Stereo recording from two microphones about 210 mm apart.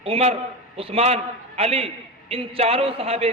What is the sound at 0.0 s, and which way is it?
A man's voice, 30° right (ahead or behind).